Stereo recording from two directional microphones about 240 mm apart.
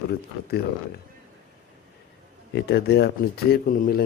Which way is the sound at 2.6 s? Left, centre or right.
Left.